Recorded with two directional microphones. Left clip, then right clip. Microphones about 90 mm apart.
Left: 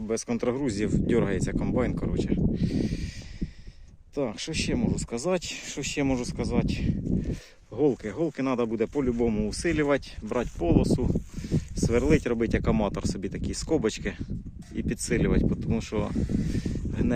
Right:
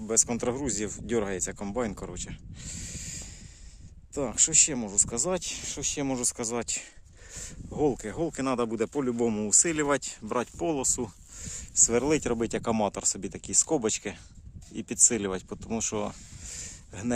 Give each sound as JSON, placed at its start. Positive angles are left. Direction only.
{"t": 0.1, "sound": "speech", "side_deg": -35}
{"t": 4.1, "sound": "speech", "side_deg": -45}
{"t": 5.5, "sound": "speech", "side_deg": -5}
{"t": 6.2, "sound": "speech", "side_deg": -55}
{"t": 7.8, "sound": "speech", "side_deg": -35}